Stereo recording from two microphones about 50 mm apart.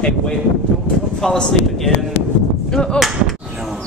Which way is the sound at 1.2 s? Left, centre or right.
Centre.